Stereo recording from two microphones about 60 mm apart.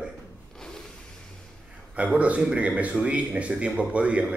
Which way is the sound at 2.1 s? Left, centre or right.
Right.